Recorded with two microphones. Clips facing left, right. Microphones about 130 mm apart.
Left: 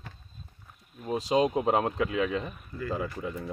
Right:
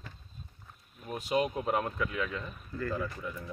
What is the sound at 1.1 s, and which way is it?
Speech, 90° left.